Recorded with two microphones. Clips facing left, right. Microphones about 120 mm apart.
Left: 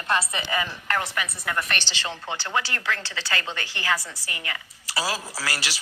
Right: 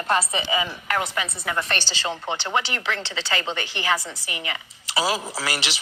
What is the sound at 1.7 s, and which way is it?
Speech, 30° right (ahead or behind).